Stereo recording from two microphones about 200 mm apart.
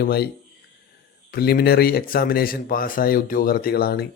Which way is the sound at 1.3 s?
50° left (ahead or behind).